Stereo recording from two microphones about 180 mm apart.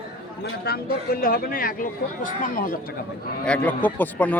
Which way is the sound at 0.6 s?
60° left (ahead or behind).